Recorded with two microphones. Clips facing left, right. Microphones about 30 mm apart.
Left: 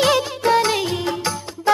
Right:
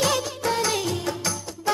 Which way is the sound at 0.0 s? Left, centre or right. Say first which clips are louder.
Left 6 dB; left.